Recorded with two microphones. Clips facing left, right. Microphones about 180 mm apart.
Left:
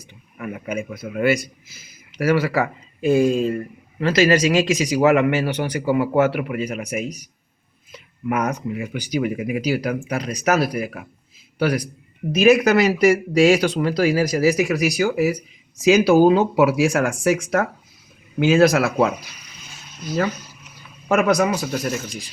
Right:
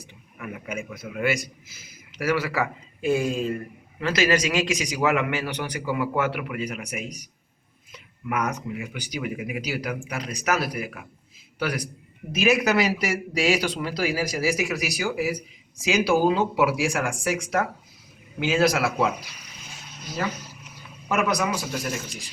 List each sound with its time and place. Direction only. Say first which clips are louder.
0.3 s a man's voice: left 6 dB; 35° left (ahead or behind)
7.9 s a man's voice: left 5 dB; 30° left (ahead or behind)
12.3 s speech: left 7 dB; 45° left (ahead or behind)
21.1 s speech: left 7 dB; 50° left (ahead or behind)